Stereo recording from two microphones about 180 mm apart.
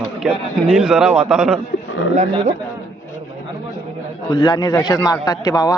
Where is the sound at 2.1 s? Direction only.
40° right (ahead or behind).